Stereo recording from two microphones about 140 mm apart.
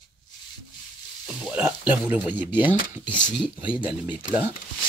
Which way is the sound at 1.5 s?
10° right (ahead or behind).